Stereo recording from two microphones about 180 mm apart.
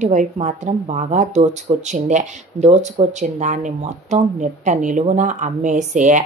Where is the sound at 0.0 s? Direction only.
45° right (ahead or behind).